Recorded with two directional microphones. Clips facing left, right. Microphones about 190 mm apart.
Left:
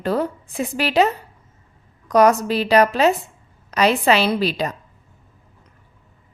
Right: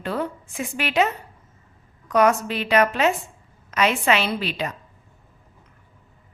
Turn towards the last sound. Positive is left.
turn(degrees=40)  # may be behind; listen again after turning